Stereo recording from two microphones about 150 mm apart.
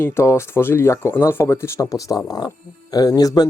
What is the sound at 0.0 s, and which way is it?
Speech, 15° left (ahead or behind).